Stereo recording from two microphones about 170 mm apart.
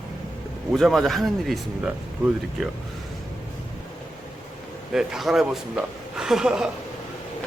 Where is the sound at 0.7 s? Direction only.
Centre (ahead or behind).